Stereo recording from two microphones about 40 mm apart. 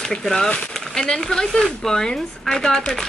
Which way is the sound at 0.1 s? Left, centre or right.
Centre.